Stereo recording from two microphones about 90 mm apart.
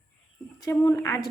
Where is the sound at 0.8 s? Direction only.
30° left (ahead or behind).